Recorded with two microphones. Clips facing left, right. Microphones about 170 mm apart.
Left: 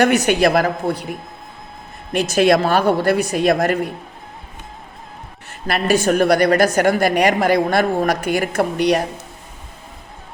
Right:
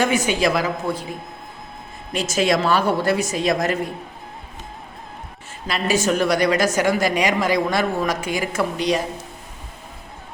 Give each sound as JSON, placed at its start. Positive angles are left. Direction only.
{"t": 0.0, "sound": "a woman's voice", "side_deg": 70}
{"t": 2.1, "sound": "a woman's voice", "side_deg": 60}
{"t": 5.5, "sound": "a woman's voice", "side_deg": 60}